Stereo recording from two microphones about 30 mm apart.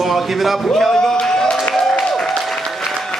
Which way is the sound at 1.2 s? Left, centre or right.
Centre.